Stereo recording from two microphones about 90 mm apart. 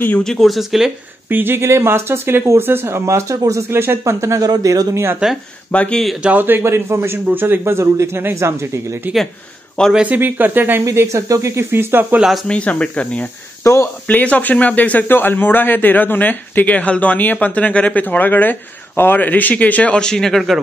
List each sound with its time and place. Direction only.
0.2 s speech: 5° left (ahead or behind)
1.3 s speech: 25° right (ahead or behind)
4.5 s a man's voice: 45° right (ahead or behind)
4.9 s speech: 30° right (ahead or behind)
5.7 s speech: 15° left (ahead or behind)
6.2 s speech: 20° right (ahead or behind)
9.9 s speech: 20° right (ahead or behind)
10.8 s speech: 35° right (ahead or behind)
12.4 s speech: 15° left (ahead or behind)
13.6 s speech: 35° left (ahead or behind)
14.0 s speech: 15° left (ahead or behind); by 20.6 s centre (ahead or behind)